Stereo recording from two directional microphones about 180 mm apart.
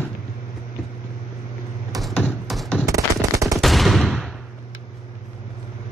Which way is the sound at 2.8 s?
20° right (ahead or behind).